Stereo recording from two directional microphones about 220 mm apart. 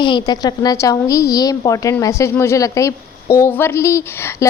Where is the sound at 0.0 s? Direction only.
20° left (ahead or behind).